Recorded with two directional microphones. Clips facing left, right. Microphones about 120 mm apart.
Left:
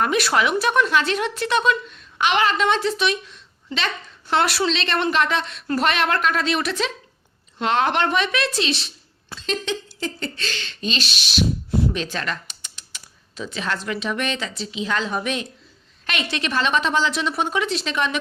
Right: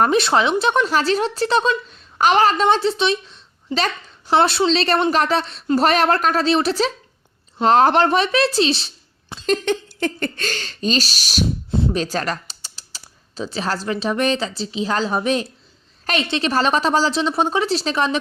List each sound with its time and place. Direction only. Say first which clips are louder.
0.0 s a woman's voice: right 4 dB; 30° right (ahead or behind)
9.5 s speech: right 6 dB; 55° right (ahead or behind)
11.7 s a sound: right 2 dB; 25° right (ahead or behind)
11.9 s a woman's voice: right 5 dB; 40° right (ahead or behind)